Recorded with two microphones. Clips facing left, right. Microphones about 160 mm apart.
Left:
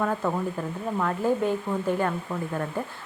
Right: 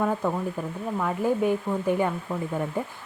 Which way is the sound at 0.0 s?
10° right (ahead or behind).